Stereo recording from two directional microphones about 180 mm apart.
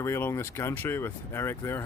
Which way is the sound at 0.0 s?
15° left (ahead or behind).